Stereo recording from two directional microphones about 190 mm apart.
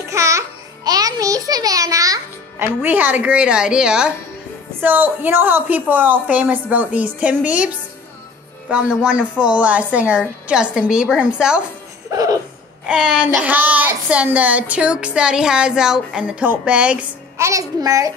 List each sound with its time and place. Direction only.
0.1 s music: 15° right (ahead or behind)
2.6 s a woman's voice: 10° right (ahead or behind)
12.1 s speech: 15° right (ahead or behind)
12.8 s speech: 5° right (ahead or behind)